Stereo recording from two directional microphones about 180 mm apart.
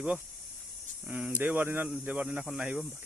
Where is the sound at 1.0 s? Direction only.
5° right (ahead or behind).